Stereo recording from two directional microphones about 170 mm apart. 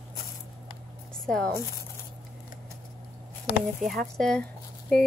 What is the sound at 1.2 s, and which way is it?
Speech, 5° left (ahead or behind).